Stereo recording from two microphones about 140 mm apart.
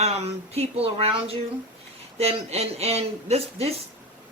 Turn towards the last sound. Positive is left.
turn(degrees=-45)  # may be behind; listen again after turning